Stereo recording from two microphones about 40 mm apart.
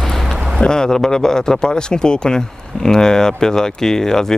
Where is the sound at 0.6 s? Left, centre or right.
Centre.